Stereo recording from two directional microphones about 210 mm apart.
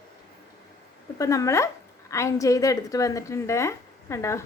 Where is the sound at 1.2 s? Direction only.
15° left (ahead or behind).